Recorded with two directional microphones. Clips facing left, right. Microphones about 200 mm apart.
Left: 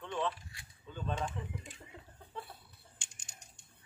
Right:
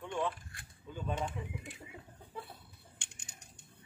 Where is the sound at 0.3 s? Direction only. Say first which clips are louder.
Even; 50° right (ahead or behind).